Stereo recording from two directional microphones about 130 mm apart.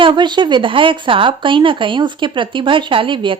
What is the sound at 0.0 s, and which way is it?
A woman's voice, 40° right (ahead or behind).